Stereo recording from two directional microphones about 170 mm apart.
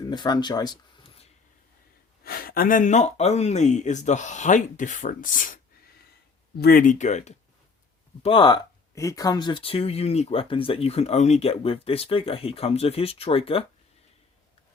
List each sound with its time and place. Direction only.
0.1 s a sound: 25° left (ahead or behind)
2.2 s speech: 60° left (ahead or behind)
6.6 s speech: 55° left (ahead or behind)
8.2 s speech: 30° left (ahead or behind)